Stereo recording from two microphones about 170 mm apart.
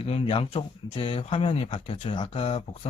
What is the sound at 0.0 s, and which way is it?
Speech, 35° left (ahead or behind).